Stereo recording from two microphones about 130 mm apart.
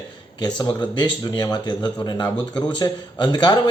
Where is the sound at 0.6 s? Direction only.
35° left (ahead or behind).